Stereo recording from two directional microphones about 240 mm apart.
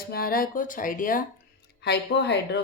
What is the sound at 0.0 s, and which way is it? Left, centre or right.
A woman's voice, left.